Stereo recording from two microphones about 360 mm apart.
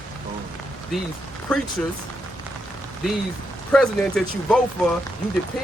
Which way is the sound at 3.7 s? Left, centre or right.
Centre.